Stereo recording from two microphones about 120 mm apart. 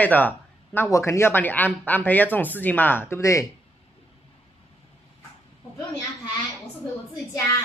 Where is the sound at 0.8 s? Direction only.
25° left (ahead or behind).